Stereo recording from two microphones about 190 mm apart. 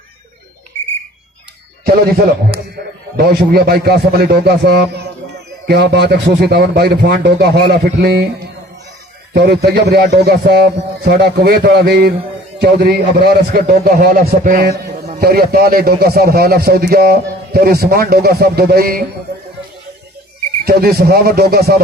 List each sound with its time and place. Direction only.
3.2 s a man's voice: 55° right (ahead or behind)
9.3 s a man's voice: 60° right (ahead or behind)
20.7 s a man's voice: 55° right (ahead or behind)